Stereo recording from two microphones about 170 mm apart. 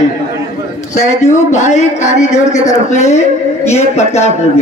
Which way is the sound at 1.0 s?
45° left (ahead or behind).